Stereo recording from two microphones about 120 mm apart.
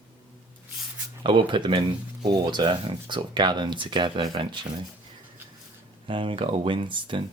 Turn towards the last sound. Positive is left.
turn(degrees=-45)  # may be behind; listen again after turning